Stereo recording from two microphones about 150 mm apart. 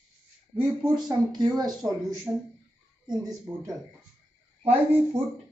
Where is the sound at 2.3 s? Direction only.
10° right (ahead or behind).